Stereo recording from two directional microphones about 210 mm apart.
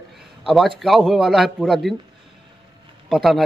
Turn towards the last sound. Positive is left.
turn(degrees=0)  # may be behind; listen again after turning